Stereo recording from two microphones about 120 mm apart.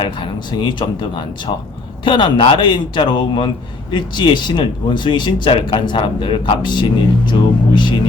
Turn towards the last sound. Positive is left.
turn(degrees=40)  # may be behind; listen again after turning